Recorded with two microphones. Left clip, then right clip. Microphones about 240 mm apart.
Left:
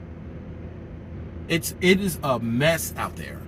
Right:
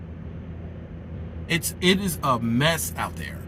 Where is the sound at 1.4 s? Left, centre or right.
Right.